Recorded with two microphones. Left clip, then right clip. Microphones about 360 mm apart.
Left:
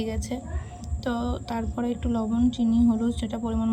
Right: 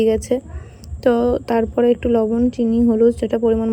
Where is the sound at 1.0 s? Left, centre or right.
Right.